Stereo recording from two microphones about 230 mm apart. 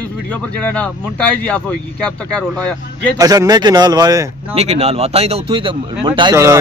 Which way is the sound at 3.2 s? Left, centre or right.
Centre.